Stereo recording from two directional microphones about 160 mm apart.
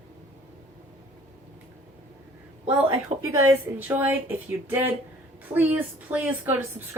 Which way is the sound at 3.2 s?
15° right (ahead or behind).